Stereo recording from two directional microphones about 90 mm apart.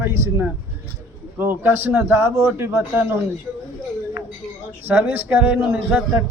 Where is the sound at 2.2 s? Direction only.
30° right (ahead or behind).